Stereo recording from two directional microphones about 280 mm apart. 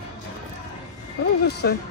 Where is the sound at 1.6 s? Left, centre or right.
Left.